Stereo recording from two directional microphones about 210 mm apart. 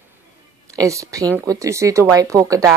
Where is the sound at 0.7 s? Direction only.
15° right (ahead or behind).